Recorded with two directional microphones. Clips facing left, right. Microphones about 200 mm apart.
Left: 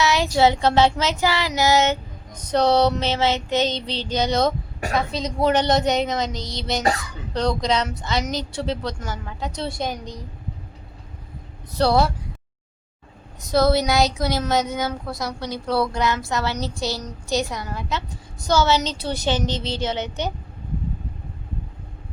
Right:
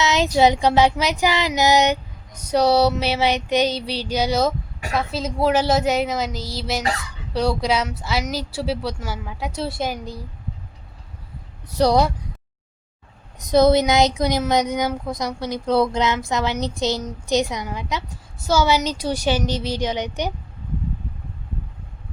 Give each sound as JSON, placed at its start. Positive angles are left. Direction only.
{"t": 0.0, "sound": "child singing", "side_deg": -20}
{"t": 4.9, "sound": "a woman's voice", "side_deg": -5}
{"t": 7.3, "sound": "child singing", "side_deg": -10}
{"t": 11.7, "sound": "child singing", "side_deg": -15}
{"t": 13.4, "sound": "child singing", "side_deg": -20}